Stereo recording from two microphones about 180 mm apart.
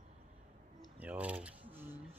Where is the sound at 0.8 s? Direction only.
5° right (ahead or behind).